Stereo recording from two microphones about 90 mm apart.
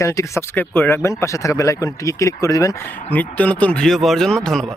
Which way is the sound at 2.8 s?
20° left (ahead or behind).